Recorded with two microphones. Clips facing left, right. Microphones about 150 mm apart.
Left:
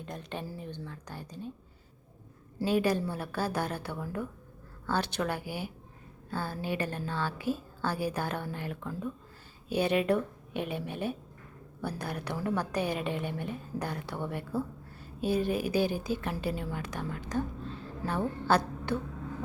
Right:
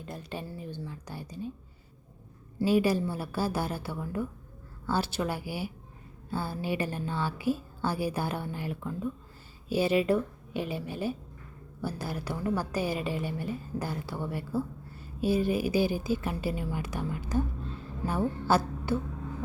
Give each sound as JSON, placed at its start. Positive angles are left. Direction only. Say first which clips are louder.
{"t": 0.0, "sound": "a woman's voice", "louder": "even", "side_deg": -5}
{"t": 2.6, "sound": "a woman's voice", "louder": "right 2 dB", "side_deg": -5}